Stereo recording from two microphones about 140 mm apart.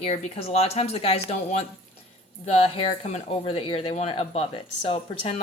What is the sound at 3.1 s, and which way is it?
Speech, 45° left (ahead or behind).